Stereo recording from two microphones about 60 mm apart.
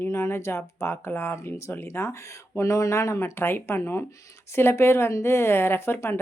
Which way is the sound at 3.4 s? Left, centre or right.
Left.